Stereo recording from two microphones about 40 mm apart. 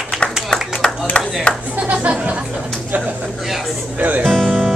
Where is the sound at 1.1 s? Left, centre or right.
Left.